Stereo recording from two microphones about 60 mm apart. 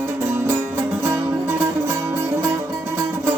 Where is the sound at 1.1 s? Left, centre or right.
Right.